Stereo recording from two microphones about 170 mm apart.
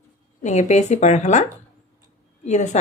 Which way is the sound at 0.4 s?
45° left (ahead or behind).